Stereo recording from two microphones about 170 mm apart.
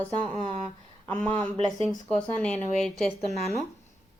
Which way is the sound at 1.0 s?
10° left (ahead or behind).